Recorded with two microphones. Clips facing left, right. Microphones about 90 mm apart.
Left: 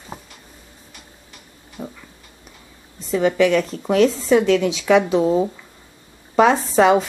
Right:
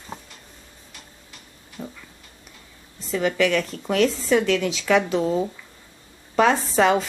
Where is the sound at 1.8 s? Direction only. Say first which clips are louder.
Left 3 dB; 20° left (ahead or behind).